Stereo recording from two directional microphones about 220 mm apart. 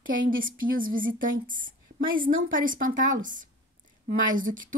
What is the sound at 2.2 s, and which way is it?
A woman's voice, 40° right (ahead or behind).